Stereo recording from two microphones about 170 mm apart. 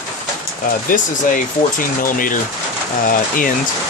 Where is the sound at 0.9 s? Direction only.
55° left (ahead or behind).